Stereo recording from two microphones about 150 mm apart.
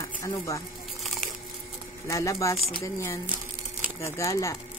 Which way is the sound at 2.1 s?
20° left (ahead or behind).